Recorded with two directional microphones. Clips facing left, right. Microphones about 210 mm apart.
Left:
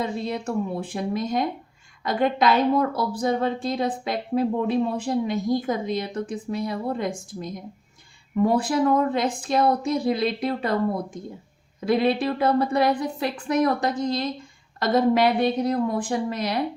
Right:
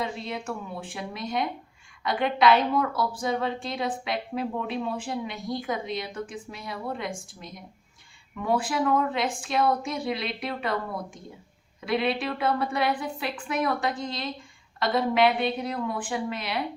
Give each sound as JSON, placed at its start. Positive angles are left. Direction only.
{"t": 0.0, "sound": "a woman's voice", "side_deg": 40}